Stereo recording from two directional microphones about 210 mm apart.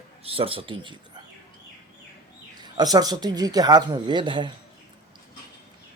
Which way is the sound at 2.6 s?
20° right (ahead or behind).